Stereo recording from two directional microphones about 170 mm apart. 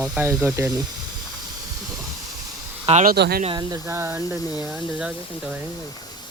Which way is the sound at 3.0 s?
70° right (ahead or behind).